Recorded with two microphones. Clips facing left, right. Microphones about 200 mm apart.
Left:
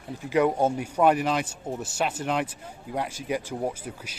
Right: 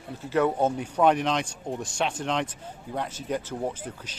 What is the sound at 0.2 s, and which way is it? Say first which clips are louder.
Speech: left 1 dB; 15° left (ahead or behind).